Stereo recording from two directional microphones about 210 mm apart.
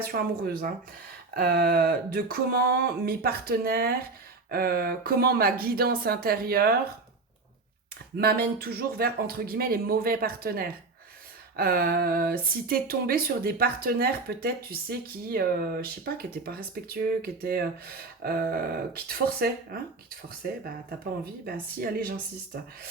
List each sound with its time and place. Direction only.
0.0 s speech: 45° right (ahead or behind)
8.2 s speech: 45° right (ahead or behind)